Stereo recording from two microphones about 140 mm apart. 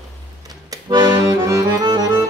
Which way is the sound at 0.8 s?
30° right (ahead or behind).